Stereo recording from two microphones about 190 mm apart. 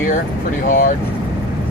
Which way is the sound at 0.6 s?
45° left (ahead or behind).